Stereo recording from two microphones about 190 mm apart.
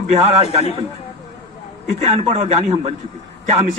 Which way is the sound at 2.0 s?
35° right (ahead or behind).